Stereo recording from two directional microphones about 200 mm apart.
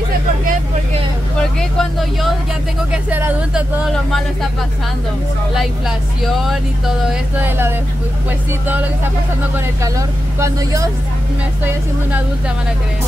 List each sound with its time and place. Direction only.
1.6 s speech: centre (ahead or behind)
2.9 s speech: 10° right (ahead or behind)
5.6 s speech: centre (ahead or behind)
9.9 s speech: 15° right (ahead or behind)